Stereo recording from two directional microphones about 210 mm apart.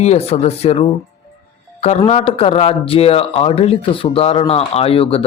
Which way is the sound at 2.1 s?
25° left (ahead or behind).